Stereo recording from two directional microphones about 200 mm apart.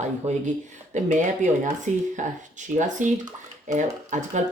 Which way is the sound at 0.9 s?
40° right (ahead or behind).